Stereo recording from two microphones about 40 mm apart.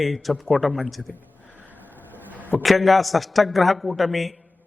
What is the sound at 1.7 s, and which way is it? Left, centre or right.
Vehicle, left.